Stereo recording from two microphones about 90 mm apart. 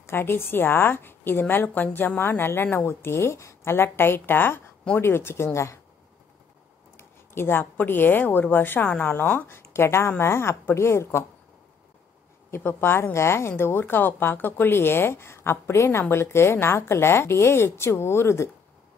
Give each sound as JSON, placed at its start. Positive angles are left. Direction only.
{"t": 0.0, "sound": "a woman's voice", "side_deg": 25}
{"t": 7.0, "sound": "a woman's voice", "side_deg": 25}
{"t": 12.4, "sound": "a woman's voice", "side_deg": 25}